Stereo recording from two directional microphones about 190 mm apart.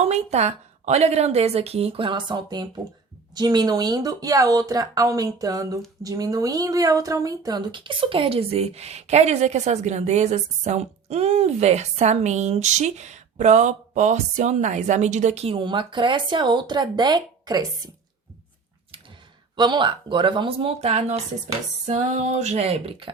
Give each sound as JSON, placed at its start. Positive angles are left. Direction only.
{"t": 0.0, "sound": "a woman's voice", "side_deg": -35}
{"t": 19.5, "sound": "speech", "side_deg": -25}